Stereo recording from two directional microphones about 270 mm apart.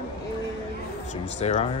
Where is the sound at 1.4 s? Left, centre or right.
Left.